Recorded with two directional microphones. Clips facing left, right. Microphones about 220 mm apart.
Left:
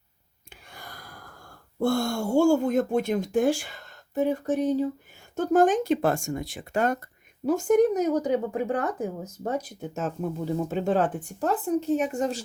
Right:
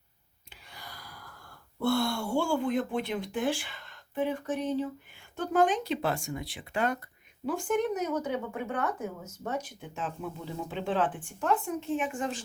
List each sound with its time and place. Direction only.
0.5 s speech: 50° left (ahead or behind)